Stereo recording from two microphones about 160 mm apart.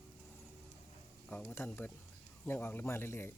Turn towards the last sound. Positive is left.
turn(degrees=15)  # may be behind; listen again after turning